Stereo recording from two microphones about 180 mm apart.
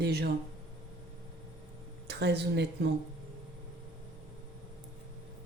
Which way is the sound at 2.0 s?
70° right (ahead or behind).